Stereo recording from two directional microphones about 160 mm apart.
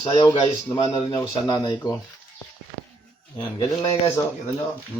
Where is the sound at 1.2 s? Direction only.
25° left (ahead or behind).